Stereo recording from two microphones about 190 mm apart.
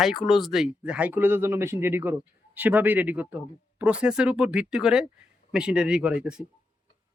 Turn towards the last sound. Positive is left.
turn(degrees=-5)  # may be behind; listen again after turning